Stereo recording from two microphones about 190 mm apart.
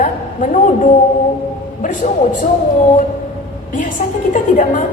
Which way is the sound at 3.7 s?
45° left (ahead or behind).